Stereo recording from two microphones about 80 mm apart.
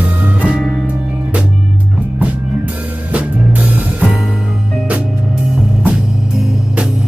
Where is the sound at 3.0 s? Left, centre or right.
Centre.